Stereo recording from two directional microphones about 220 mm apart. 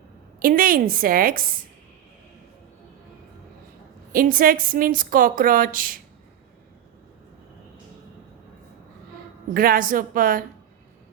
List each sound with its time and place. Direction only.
0.3 s a woman's voice: 40° right (ahead or behind)
4.1 s a woman's voice: 40° right (ahead or behind)
9.6 s a woman's voice: 40° right (ahead or behind)